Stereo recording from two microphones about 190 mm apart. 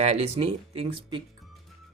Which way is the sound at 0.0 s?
35° right (ahead or behind).